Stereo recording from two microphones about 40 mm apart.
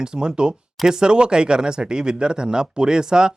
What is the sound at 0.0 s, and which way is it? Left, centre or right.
Speech, centre.